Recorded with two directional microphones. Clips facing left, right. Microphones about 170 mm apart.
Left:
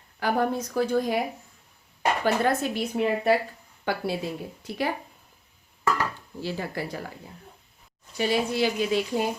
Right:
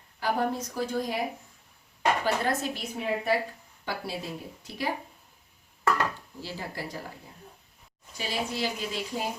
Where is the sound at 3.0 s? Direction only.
75° left (ahead or behind).